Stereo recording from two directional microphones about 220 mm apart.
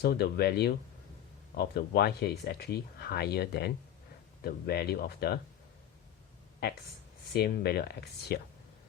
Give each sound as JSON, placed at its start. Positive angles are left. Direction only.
{"t": 0.0, "sound": "speech", "side_deg": 45}
{"t": 7.3, "sound": "speech", "side_deg": 45}